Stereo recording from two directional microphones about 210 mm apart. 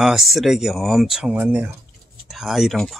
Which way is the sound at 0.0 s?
Centre (ahead or behind).